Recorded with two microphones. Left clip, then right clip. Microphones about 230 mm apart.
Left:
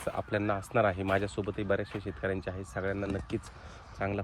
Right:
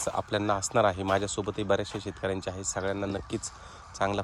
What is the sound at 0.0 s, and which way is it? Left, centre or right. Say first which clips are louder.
Speech: right 3 dB; centre.